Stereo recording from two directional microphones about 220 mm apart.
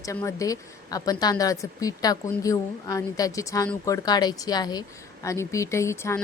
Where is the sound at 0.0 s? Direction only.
15° left (ahead or behind).